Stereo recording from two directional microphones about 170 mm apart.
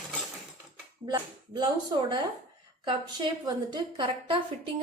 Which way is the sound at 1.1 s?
25° right (ahead or behind).